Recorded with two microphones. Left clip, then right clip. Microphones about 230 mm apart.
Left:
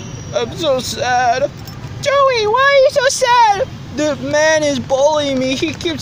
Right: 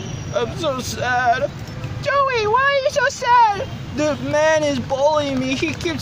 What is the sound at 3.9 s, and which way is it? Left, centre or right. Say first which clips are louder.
Speech: left 3 dB; left.